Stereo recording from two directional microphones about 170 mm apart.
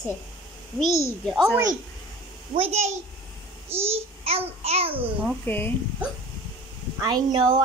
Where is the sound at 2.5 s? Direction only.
35° right (ahead or behind).